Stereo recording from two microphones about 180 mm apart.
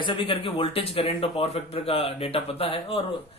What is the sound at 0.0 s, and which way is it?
Speech, 30° left (ahead or behind).